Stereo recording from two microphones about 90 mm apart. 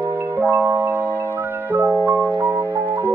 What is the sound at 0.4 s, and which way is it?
Glockenspiel, 20° right (ahead or behind).